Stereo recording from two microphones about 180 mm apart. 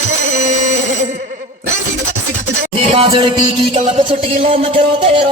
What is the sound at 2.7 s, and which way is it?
Music, 35° right (ahead or behind).